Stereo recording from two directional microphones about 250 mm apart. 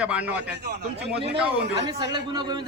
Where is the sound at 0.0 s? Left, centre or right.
Centre.